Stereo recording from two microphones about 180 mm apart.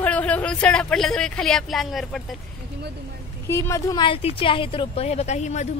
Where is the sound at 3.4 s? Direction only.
15° left (ahead or behind).